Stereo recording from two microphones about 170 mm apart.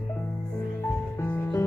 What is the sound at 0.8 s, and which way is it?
Music, 15° left (ahead or behind).